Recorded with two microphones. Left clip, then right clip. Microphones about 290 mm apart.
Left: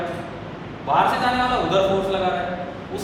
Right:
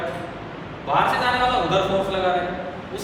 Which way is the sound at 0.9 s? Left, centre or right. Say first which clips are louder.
Left 1 dB; centre.